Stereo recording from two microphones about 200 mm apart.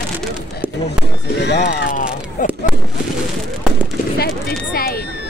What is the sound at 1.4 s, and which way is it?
Speech, 60° left (ahead or behind).